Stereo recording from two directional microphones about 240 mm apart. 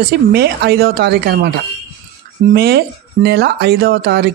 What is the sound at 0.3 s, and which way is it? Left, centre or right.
Speech, right.